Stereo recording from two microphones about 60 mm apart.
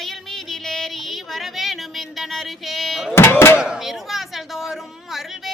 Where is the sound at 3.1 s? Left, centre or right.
Left.